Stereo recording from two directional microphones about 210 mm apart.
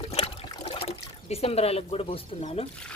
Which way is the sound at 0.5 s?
25° left (ahead or behind).